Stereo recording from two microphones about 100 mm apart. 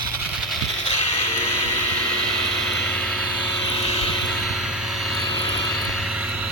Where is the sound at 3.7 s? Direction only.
90° left.